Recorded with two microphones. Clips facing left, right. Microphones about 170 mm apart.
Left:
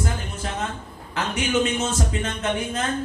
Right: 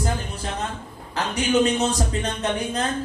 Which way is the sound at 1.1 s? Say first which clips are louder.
Right 2 dB; 35° right (ahead or behind).